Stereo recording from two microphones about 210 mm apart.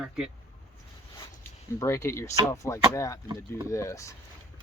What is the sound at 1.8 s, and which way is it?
Speech, 15° left (ahead or behind).